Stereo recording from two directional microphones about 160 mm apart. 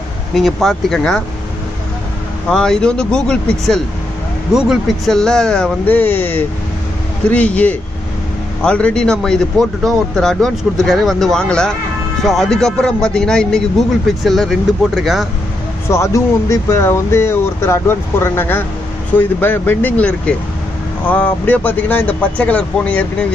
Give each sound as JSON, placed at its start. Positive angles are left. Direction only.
{"t": 0.4, "sound": "a man's voice", "side_deg": 0}
{"t": 2.5, "sound": "a man's voice", "side_deg": 5}
{"t": 15.9, "sound": "speech", "side_deg": 20}